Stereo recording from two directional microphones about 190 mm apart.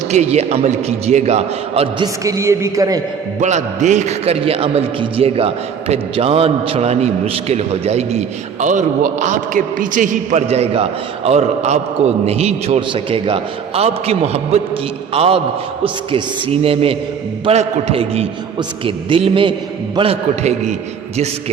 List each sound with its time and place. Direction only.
0.1 s a man's voice: 35° right (ahead or behind)
2.2 s a man's voice: 15° right (ahead or behind)
3.4 s a man's voice: 40° right (ahead or behind)